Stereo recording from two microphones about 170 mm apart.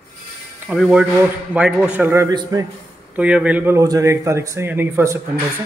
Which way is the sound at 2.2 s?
20° right (ahead or behind).